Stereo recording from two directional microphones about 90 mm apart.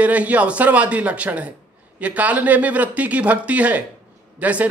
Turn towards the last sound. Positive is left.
turn(degrees=-15)  # may be behind; listen again after turning